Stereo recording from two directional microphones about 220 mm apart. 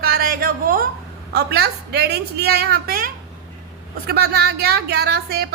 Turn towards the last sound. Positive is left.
turn(degrees=-45)  # may be behind; listen again after turning